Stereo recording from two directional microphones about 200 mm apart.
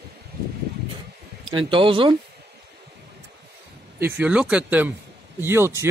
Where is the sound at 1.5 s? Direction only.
25° right (ahead or behind).